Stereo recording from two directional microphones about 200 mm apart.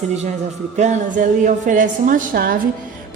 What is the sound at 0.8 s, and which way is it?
A woman's voice, 40° right (ahead or behind).